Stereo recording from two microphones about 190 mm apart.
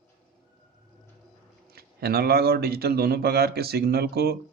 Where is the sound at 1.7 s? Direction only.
55° right (ahead or behind).